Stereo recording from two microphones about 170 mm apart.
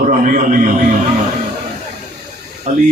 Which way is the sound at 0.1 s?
50° right (ahead or behind).